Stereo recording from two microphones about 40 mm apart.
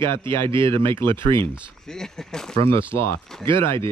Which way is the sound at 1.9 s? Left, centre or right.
Centre.